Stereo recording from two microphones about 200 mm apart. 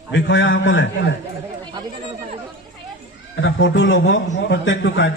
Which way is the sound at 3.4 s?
70° left (ahead or behind).